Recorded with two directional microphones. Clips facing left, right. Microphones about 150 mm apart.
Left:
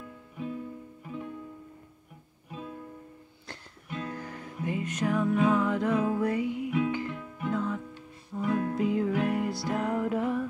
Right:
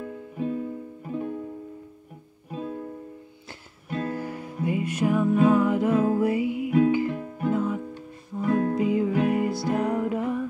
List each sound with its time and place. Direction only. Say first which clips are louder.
0.0 s music: right 8 dB; 45° right (ahead or behind)
2.5 s music: right 8 dB; 40° right (ahead or behind)
3.9 s music: right 7 dB; 40° right (ahead or behind)
4.2 s music: right 6 dB; 10° right (ahead or behind)
7.1 s music: right 7 dB; 40° right (ahead or behind)
7.5 s music: right 3 dB; 5° right (ahead or behind)
8.4 s music: right 5 dB; 45° right (ahead or behind)
8.7 s music: right 4 dB; centre (ahead or behind)